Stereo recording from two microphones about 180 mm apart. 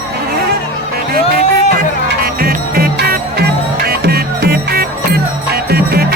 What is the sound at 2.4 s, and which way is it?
Music, 60° right (ahead or behind).